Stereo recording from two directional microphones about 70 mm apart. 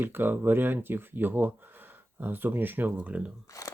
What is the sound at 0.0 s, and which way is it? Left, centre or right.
Speech, right.